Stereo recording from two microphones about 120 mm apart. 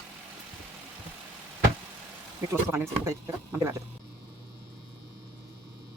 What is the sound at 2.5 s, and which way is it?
Speech, 20° right (ahead or behind).